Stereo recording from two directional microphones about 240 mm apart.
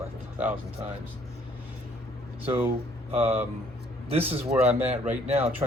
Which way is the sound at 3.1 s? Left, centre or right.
Centre.